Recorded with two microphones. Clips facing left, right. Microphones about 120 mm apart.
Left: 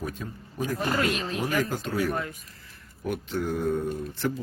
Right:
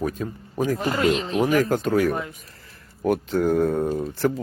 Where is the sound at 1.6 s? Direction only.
55° right (ahead or behind).